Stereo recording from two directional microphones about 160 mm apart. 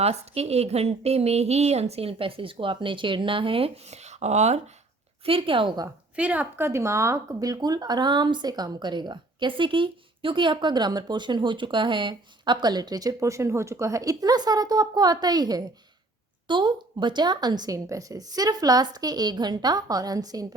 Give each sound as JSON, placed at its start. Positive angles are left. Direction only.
{"t": 0.0, "sound": "speech", "side_deg": -40}
{"t": 5.2, "sound": "speech", "side_deg": -35}
{"t": 6.1, "sound": "speech", "side_deg": -10}